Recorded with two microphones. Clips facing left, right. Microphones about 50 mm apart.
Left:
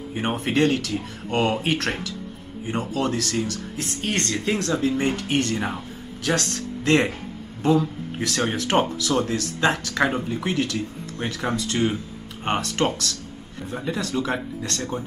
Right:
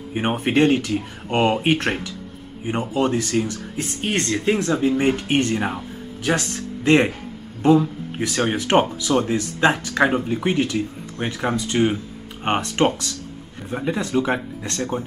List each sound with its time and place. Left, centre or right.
0.1 s speech: right